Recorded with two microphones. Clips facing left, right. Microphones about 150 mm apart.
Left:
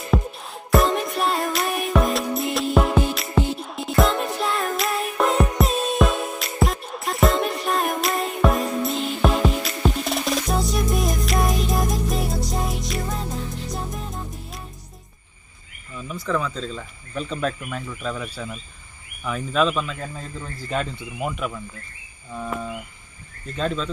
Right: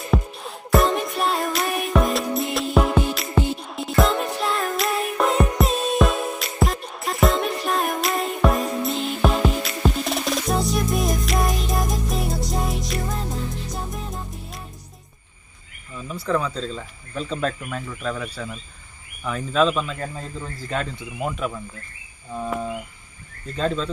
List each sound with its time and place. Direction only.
0.1 s music: centre (ahead or behind)
16.1 s speech: 10° right (ahead or behind)
16.6 s speech: 5° left (ahead or behind)
20.7 s speech: 10° left (ahead or behind)
23.6 s speech: 20° right (ahead or behind)